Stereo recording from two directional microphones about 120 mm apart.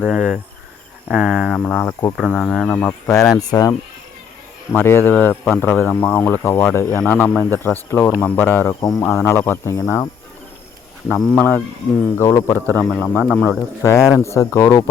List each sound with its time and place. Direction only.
0.0 s speech: 5° right (ahead or behind)
1.0 s cricket: 10° right (ahead or behind)
1.5 s speech: 15° left (ahead or behind)
2.7 s speech: 20° left (ahead or behind)
4.7 s speech: 20° left (ahead or behind)
8.8 s speech: 30° left (ahead or behind)
11.1 s speech: 15° left (ahead or behind)
12.1 s speech: 25° left (ahead or behind)
12.7 s speech: 10° left (ahead or behind)
13.8 s speech: 25° left (ahead or behind)